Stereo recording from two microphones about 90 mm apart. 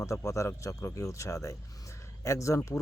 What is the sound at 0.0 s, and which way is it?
Speech, 35° left (ahead or behind).